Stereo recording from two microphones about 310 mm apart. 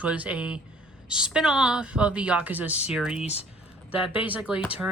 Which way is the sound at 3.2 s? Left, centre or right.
Left.